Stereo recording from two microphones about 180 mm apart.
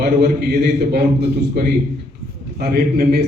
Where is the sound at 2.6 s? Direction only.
60° right (ahead or behind).